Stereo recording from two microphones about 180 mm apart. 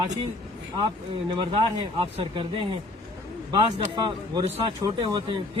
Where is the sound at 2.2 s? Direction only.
30° right (ahead or behind).